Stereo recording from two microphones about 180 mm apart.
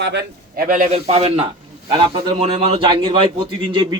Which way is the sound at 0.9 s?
35° right (ahead or behind).